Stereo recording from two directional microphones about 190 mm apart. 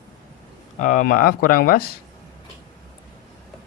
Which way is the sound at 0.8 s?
45° left (ahead or behind).